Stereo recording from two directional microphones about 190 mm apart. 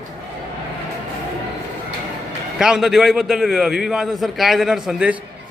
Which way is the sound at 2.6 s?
5° right (ahead or behind).